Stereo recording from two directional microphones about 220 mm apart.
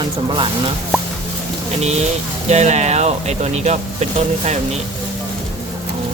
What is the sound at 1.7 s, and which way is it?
Speech, 30° right (ahead or behind).